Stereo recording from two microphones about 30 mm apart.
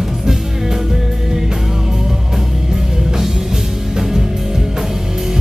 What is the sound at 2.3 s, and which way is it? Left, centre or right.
Music, centre.